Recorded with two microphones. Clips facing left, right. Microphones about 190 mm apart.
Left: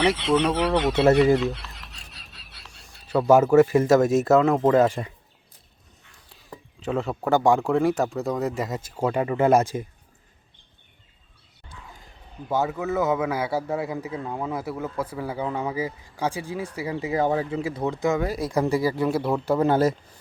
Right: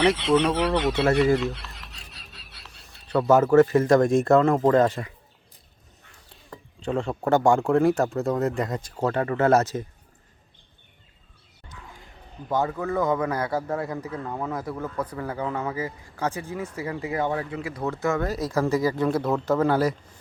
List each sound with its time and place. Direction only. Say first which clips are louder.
0.0 s speech: right 1 dB; centre (ahead or behind)
6.1 s speech: left 1 dB; centre (ahead or behind)
12.5 s speech: left 1 dB; 5° left (ahead or behind); by 20.0 s 25° left (ahead or behind)